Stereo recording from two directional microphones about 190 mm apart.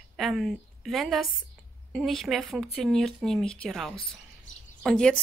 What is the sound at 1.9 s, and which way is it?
A woman's voice, centre (ahead or behind).